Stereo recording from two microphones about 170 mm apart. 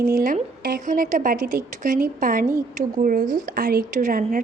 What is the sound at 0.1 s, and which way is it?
A woman's voice, 55° right (ahead or behind).